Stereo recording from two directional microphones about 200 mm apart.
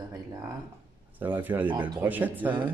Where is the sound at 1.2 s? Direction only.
10° right (ahead or behind).